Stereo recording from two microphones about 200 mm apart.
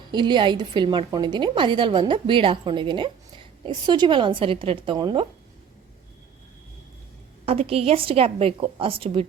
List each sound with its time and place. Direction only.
0.1 s a woman's voice: 25° right (ahead or behind)
7.4 s a woman's voice: 30° right (ahead or behind)